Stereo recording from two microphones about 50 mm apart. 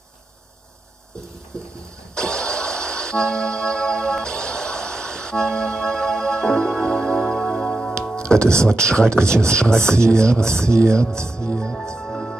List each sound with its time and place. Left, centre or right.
2.1 s music: centre
7.9 s speech: centre
11.3 s music: centre
12.1 s music: centre